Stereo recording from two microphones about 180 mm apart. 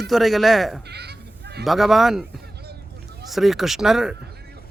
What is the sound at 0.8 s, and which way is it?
Bleat, 65° right (ahead or behind).